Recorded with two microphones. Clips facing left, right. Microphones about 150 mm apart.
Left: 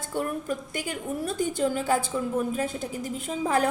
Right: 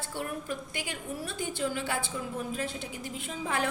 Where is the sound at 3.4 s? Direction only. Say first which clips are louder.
Left 7 dB; 40° left (ahead or behind).